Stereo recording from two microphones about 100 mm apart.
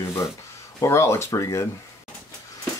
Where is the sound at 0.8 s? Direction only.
25° left (ahead or behind).